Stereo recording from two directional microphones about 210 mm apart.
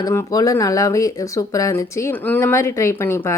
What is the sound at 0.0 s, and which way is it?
Speech, 15° left (ahead or behind).